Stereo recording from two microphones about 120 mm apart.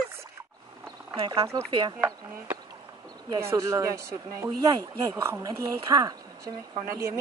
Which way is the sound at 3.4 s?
25° right (ahead or behind).